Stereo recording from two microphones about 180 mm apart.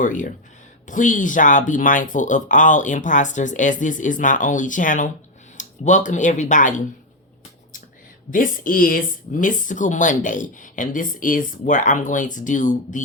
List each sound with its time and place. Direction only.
0.0 s speech: 45° left (ahead or behind)
8.3 s speech: 50° left (ahead or behind)